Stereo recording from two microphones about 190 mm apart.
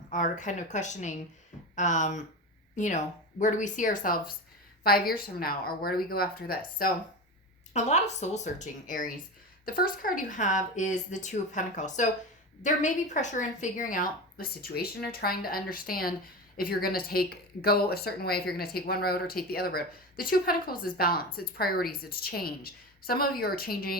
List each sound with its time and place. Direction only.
0.1 s a woman's voice: 40° left (ahead or behind)
7.7 s a woman's voice: 35° left (ahead or behind)